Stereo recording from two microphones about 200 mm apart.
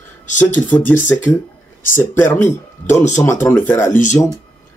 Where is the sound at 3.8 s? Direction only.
40° left (ahead or behind).